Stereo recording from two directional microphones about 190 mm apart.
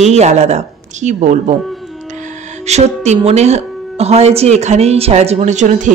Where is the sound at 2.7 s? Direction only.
35° right (ahead or behind).